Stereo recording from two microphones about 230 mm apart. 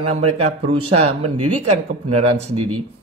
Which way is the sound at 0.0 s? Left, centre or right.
Right.